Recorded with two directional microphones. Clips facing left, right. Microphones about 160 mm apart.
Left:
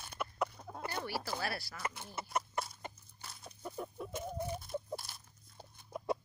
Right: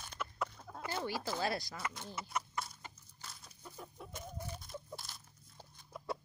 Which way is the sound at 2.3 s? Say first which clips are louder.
Left 3 dB; 55° left (ahead or behind).